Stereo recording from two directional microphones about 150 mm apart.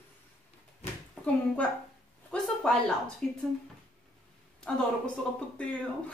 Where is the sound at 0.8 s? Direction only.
50° left (ahead or behind).